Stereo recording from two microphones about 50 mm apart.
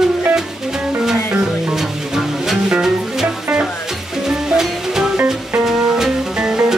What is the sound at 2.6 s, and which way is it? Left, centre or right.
Music, centre.